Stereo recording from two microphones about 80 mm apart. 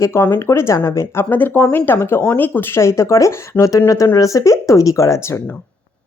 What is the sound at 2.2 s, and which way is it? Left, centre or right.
Speech, left.